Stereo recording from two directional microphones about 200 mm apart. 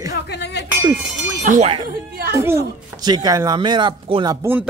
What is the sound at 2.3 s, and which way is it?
Speech, 15° right (ahead or behind).